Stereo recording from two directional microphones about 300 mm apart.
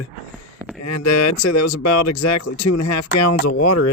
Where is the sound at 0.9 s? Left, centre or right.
Left.